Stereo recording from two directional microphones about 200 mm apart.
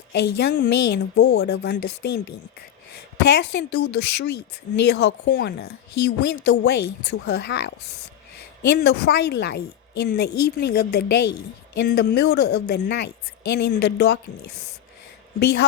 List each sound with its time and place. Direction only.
0.1 s a woman's voice: 55° left (ahead or behind)
3.2 s a woman's voice: 55° left (ahead or behind)